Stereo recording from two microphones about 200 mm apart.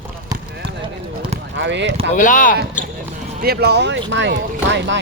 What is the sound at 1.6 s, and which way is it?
Speech, 65° right (ahead or behind).